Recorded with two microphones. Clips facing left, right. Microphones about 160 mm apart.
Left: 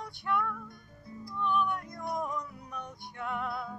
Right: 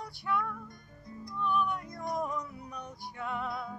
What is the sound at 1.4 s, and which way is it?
Music, 10° right (ahead or behind).